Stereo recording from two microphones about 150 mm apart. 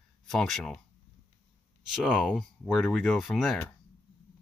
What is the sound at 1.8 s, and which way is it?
Speech, 5° right (ahead or behind).